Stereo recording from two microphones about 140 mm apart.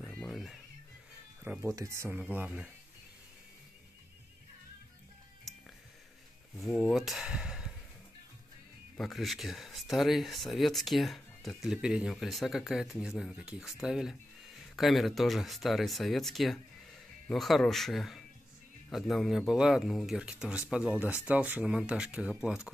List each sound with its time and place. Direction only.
0.0 s music: 5° left (ahead or behind)
1.4 s speech: 15° right (ahead or behind)
2.2 s speech: 10° right (ahead or behind)
5.5 s music: centre (ahead or behind)
6.9 s speech: centre (ahead or behind)
8.9 s speech: centre (ahead or behind)